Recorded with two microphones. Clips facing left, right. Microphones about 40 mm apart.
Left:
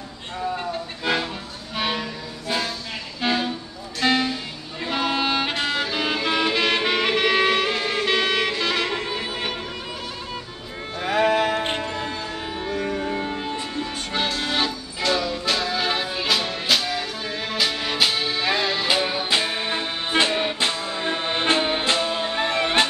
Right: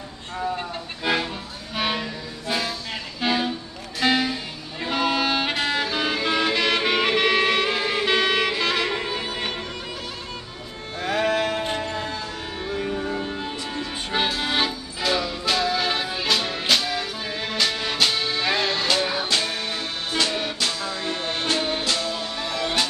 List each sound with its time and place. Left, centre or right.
1.0 s music: centre
3.2 s a sound: centre
4.0 s music: centre
11.0 s music: centre
14.1 s music: centre
18.9 s music: centre; by 22.8 s left